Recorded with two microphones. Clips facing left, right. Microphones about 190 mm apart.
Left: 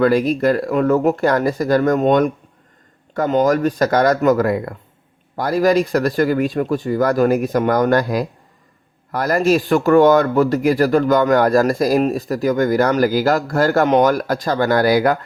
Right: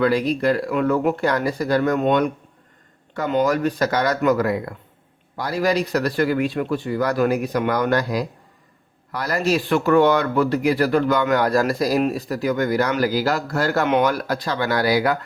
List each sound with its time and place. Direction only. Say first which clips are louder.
0.0 s speech: left 4 dB; 50° left (ahead or behind)